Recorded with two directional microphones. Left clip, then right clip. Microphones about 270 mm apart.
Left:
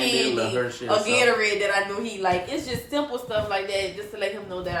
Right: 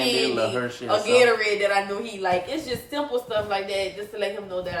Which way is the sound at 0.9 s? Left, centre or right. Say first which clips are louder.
Right 2 dB; centre.